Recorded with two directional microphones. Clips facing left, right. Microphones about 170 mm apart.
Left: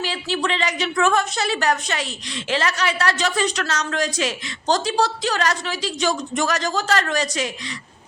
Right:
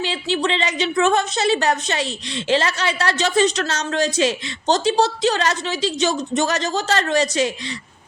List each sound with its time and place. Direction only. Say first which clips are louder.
0.0 s a woman's voice: right 3 dB; 25° right (ahead or behind)